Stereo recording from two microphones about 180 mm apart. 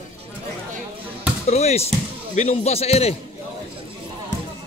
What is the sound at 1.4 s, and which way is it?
A man's voice, 35° left (ahead or behind).